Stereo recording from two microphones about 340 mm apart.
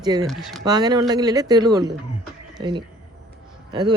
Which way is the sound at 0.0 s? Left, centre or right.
Centre.